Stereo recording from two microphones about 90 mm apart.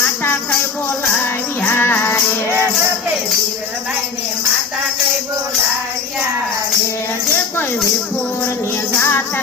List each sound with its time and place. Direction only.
1.2 s music: 25° left (ahead or behind)
9.0 s music: 25° left (ahead or behind)